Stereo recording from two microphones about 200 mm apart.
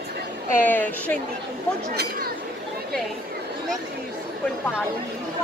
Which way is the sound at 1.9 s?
50° right (ahead or behind).